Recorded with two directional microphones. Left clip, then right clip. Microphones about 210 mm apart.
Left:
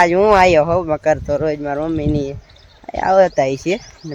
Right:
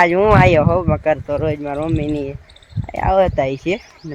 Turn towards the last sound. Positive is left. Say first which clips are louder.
# left 1 dB
turn(degrees=30)  # may be behind; listen again after turning